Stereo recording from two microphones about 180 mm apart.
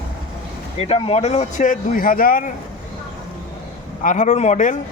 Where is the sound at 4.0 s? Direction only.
45° left (ahead or behind).